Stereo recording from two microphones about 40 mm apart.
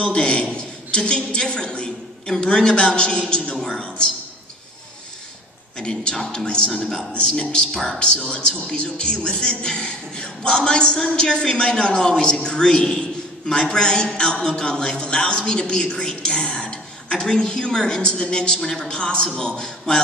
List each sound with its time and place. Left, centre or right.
0.0 s a man's voice: left
5.8 s a man's voice: left